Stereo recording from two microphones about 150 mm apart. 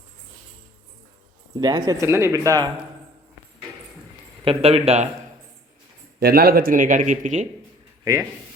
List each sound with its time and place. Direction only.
1.5 s speech: 25° right (ahead or behind)
4.4 s speech: 45° right (ahead or behind)
6.1 s speech: 90° right; by 7.4 s 55° right (ahead or behind)